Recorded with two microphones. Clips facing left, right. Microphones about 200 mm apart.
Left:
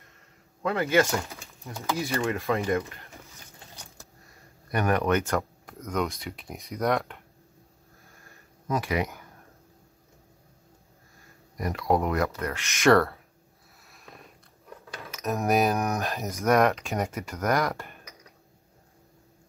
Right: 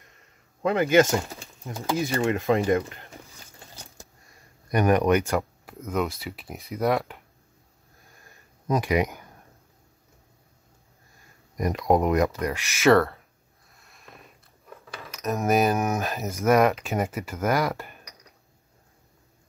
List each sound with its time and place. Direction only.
0.6 s speech: 20° right (ahead or behind)
1.3 s pigeon: 30° right (ahead or behind)
2.0 s speech: 25° right (ahead or behind)
4.6 s speech: 15° right (ahead or behind)
8.6 s speech: 15° right (ahead or behind)
11.5 s speech: 20° right (ahead or behind); by 13.2 s centre (ahead or behind)
13.7 s sniff: centre (ahead or behind)
15.0 s speech: centre (ahead or behind)